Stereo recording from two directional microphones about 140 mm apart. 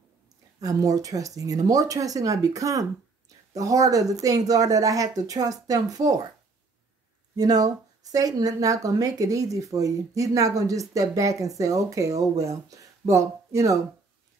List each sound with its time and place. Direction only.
0.6 s speech: 25° right (ahead or behind)
7.3 s speech: 25° right (ahead or behind)